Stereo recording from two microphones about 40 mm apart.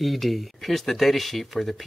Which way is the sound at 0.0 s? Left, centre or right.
Centre.